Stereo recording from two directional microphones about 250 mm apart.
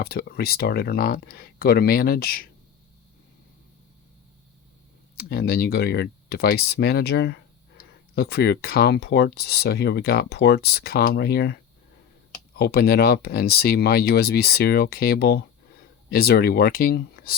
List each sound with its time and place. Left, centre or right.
0.0 s speech: left
5.1 s speech: left